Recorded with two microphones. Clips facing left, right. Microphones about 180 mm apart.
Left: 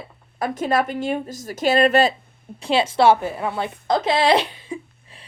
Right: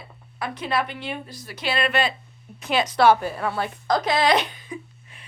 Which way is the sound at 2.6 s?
30° left (ahead or behind).